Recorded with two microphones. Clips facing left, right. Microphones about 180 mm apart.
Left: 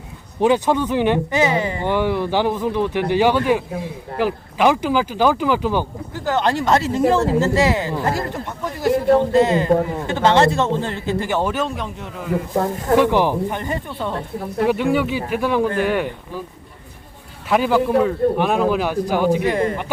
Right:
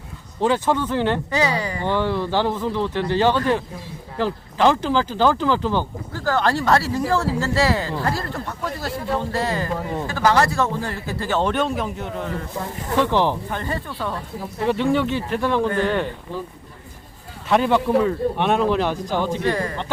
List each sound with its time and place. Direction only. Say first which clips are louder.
0.3 s a man's voice: left 3 dB; 15° left (ahead or behind)
12.6 s speech: left 9 dB; 55° left (ahead or behind)
13.0 s speech: left 1 dB; 10° left (ahead or behind)
14.7 s speech: right 1 dB; 5° left (ahead or behind)
17.5 s a man's voice: left 1 dB; 5° left (ahead or behind); by 19.8 s 20° left (ahead or behind)